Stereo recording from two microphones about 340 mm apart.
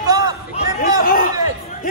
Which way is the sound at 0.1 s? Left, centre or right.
Centre.